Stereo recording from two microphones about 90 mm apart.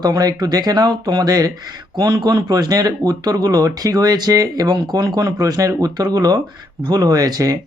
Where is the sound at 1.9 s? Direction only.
60° right (ahead or behind).